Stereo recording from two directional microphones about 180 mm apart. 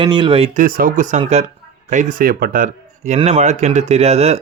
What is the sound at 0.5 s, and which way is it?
Speech, 50° right (ahead or behind).